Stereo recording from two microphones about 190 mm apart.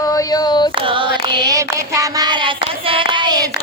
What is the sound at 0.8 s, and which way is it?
Child singing, 25° right (ahead or behind).